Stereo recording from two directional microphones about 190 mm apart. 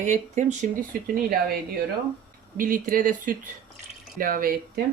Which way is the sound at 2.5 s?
45° right (ahead or behind).